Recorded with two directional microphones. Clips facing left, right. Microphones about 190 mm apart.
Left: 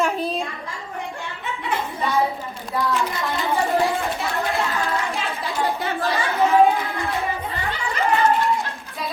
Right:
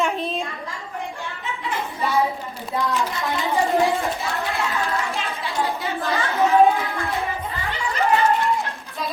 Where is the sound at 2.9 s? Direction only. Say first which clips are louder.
Left 1 dB; centre (ahead or behind).